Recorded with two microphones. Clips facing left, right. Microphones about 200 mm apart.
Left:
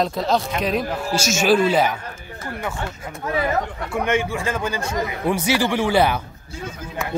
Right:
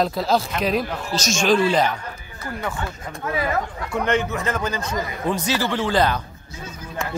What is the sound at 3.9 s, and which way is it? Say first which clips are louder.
Speech: even; 10° left (ahead or behind).